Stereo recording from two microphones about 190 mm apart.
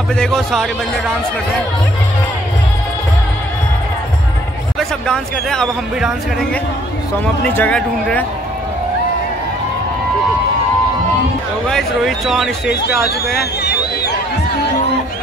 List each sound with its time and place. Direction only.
0.1 s speech: 5° left (ahead or behind)
4.7 s speech: centre (ahead or behind)
11.7 s speech: centre (ahead or behind)